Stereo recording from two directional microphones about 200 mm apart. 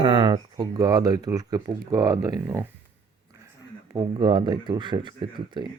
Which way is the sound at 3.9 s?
25° right (ahead or behind).